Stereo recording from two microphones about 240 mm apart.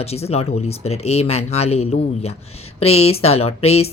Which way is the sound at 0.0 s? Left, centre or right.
Left.